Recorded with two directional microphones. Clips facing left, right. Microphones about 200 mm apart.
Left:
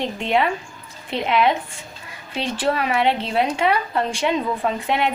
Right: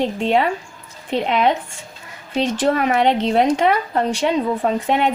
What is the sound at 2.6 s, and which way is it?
A woman's voice, 50° right (ahead or behind).